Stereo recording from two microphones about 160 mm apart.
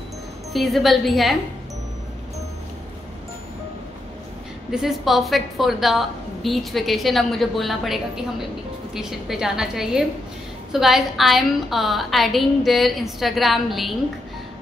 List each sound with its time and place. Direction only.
0.5 s a woman's voice: centre (ahead or behind)
4.6 s a woman's voice: 5° right (ahead or behind)